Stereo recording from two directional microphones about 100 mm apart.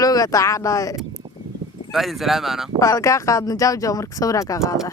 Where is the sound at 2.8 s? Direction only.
35° left (ahead or behind).